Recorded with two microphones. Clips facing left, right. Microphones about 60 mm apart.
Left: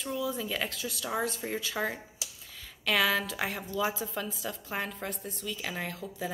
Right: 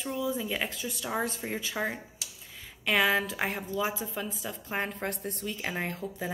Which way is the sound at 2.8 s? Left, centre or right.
Right.